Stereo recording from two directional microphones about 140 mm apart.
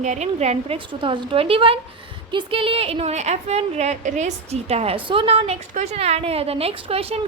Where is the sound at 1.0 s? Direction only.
35° right (ahead or behind).